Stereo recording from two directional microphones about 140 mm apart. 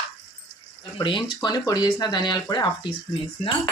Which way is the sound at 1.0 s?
35° left (ahead or behind).